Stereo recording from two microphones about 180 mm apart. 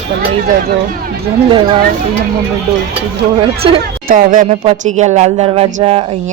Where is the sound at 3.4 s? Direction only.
30° right (ahead or behind).